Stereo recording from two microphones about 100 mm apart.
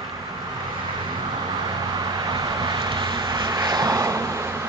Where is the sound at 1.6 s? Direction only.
45° right (ahead or behind).